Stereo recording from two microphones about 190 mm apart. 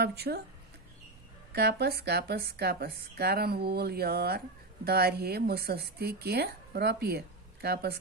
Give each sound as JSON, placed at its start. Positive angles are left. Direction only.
{"t": 0.0, "sound": "speech", "side_deg": -60}
{"t": 1.5, "sound": "speech", "side_deg": -60}